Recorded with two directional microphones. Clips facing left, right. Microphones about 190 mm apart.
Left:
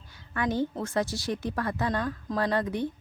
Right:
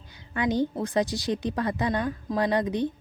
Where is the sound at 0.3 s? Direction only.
15° right (ahead or behind).